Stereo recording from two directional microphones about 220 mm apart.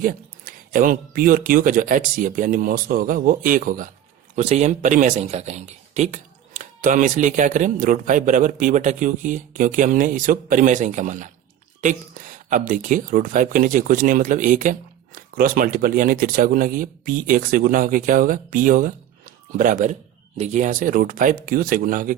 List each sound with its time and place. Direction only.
0.0 s speech: 40° right (ahead or behind)